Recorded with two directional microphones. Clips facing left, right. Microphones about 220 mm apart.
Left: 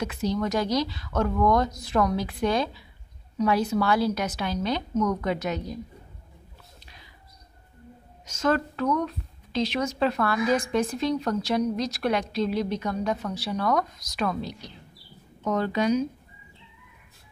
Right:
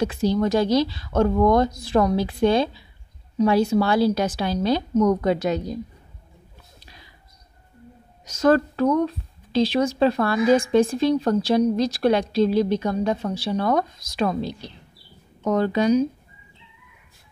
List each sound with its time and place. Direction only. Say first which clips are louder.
0.0 s speech: right 6 dB; 30° right (ahead or behind)
8.3 s speech: right 7 dB; 35° right (ahead or behind)